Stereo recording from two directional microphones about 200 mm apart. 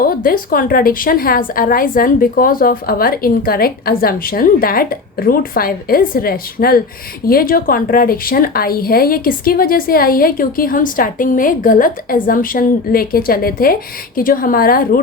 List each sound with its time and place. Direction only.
0.0 s a woman's voice: 45° left (ahead or behind)